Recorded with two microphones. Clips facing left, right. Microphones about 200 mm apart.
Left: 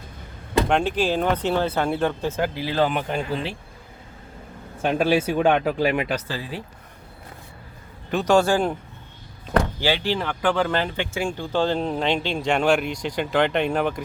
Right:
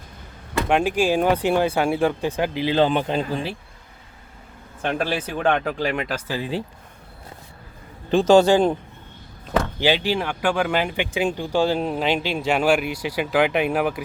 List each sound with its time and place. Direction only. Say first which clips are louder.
0.7 s speech: right 6 dB; 10° right (ahead or behind)
4.8 s speech: left 4 dB; 5° left (ahead or behind)
6.1 s speech: right 2 dB; 15° right (ahead or behind)
8.1 s a man's voice: right 4 dB; 25° right (ahead or behind)
9.8 s speech: right 2 dB; 15° right (ahead or behind)